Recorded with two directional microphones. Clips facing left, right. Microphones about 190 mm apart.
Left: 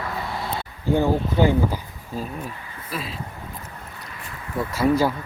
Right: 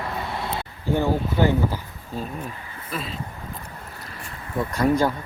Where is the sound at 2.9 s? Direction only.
Centre (ahead or behind).